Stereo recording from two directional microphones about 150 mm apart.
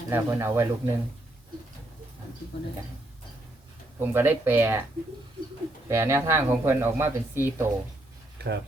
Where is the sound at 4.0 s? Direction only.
15° right (ahead or behind).